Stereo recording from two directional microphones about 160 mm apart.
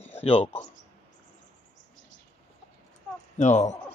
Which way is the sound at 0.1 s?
40° left (ahead or behind).